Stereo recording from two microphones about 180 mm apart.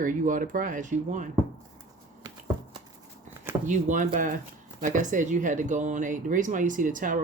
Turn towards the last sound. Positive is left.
turn(degrees=-45)  # may be behind; listen again after turning